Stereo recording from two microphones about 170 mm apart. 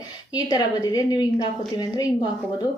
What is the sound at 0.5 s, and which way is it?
A woman's voice, 20° left (ahead or behind).